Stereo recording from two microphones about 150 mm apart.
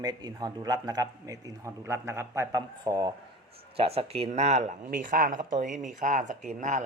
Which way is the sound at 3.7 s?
40° right (ahead or behind).